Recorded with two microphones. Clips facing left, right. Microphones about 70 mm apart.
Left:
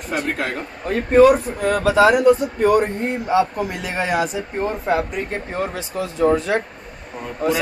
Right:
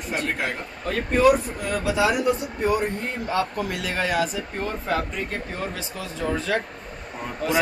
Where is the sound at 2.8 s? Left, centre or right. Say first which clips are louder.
Left 5 dB; left.